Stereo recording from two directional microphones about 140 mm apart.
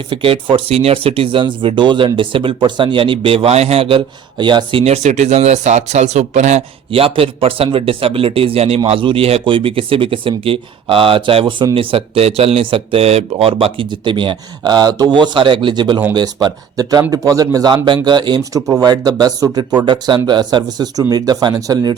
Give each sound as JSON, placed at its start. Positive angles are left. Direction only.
{"t": 0.1, "sound": "speech", "side_deg": -40}